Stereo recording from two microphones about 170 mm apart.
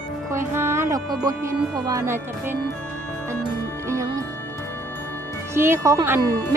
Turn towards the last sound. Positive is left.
turn(degrees=-15)  # may be behind; listen again after turning